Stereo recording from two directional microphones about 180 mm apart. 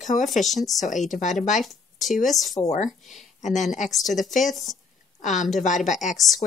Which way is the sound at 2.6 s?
40° left (ahead or behind).